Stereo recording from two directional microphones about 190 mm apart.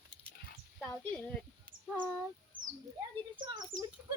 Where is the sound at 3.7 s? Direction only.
45° right (ahead or behind).